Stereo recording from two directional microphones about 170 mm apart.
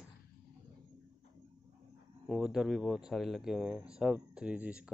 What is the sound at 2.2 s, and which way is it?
Speech, 5° right (ahead or behind).